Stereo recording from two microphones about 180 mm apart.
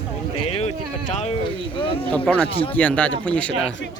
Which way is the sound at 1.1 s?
40° left (ahead or behind).